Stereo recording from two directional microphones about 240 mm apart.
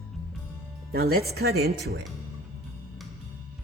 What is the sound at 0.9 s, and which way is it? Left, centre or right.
Speech, right.